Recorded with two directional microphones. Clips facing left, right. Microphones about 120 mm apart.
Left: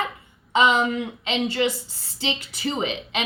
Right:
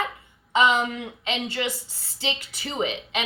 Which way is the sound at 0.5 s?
25° left (ahead or behind).